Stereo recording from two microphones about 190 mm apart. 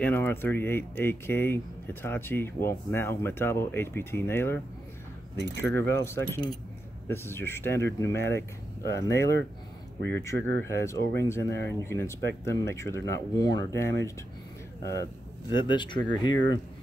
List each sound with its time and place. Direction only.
0.0 s speech: 10° left (ahead or behind)
5.8 s speech: 10° left (ahead or behind)